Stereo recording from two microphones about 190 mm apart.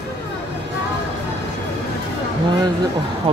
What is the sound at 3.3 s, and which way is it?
Speech, 25° right (ahead or behind).